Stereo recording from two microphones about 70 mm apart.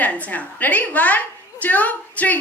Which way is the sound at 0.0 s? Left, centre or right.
Left.